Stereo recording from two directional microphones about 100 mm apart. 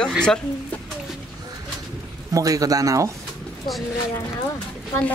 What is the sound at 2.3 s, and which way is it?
Speech, 35° right (ahead or behind).